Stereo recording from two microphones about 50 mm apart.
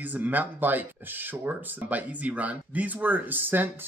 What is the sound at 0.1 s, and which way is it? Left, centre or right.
Speech, right.